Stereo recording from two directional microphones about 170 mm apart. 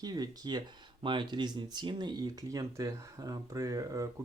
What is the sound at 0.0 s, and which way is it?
Speech, 25° right (ahead or behind).